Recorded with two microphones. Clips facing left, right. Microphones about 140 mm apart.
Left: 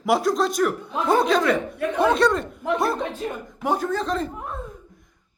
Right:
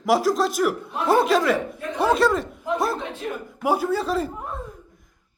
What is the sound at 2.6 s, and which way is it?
Speech, 70° left (ahead or behind).